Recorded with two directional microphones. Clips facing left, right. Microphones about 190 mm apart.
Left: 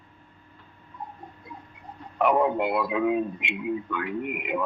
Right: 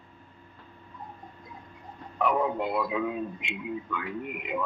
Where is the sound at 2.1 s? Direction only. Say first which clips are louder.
Left 4 dB; 65° left (ahead or behind).